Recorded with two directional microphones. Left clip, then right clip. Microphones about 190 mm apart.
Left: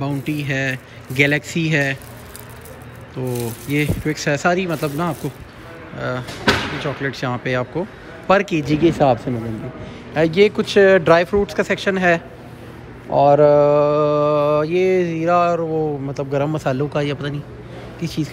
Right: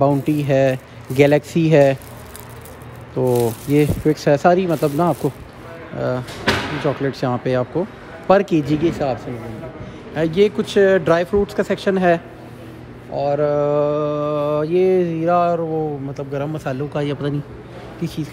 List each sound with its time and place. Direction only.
0.0 s speech: 30° right (ahead or behind)
3.2 s speech: 30° right (ahead or behind)
8.8 s speech: centre (ahead or behind)
10.1 s mantra: 15° right (ahead or behind)
13.1 s mantra: centre (ahead or behind)